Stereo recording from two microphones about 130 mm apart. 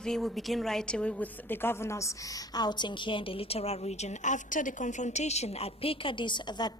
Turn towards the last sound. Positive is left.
turn(degrees=35)  # may be behind; listen again after turning